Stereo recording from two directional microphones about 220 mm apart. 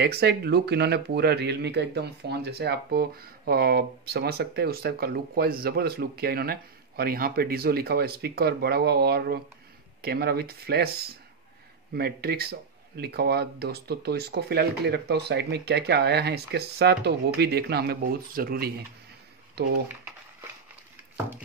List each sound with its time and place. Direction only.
0.0 s speech: 45° right (ahead or behind)